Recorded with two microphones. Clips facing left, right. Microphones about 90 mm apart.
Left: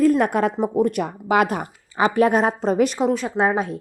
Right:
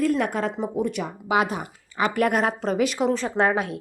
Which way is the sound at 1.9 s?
25° left (ahead or behind).